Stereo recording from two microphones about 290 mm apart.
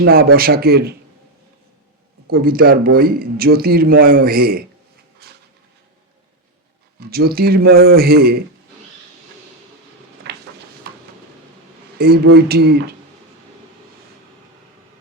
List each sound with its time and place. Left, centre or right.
0.0 s speech: right
2.2 s speech: right
5.2 s a sound: right
7.0 s speech: right
10.3 s a sound: right
11.9 s speech: right